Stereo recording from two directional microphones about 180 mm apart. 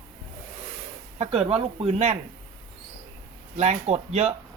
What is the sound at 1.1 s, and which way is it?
Speech, 35° right (ahead or behind).